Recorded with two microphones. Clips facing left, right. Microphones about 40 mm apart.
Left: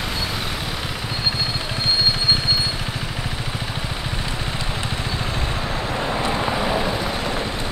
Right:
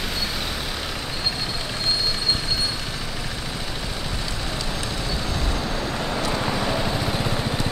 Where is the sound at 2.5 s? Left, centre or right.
Left.